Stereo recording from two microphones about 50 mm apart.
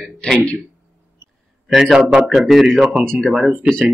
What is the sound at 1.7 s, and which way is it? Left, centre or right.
A man's voice, centre.